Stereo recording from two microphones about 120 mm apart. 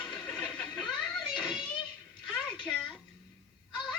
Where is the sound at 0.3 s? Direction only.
10° left (ahead or behind).